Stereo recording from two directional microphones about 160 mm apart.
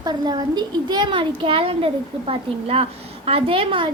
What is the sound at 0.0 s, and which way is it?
Speech, 25° right (ahead or behind).